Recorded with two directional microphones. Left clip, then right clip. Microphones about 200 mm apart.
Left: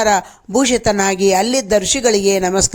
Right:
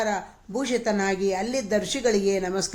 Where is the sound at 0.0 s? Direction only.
40° left (ahead or behind).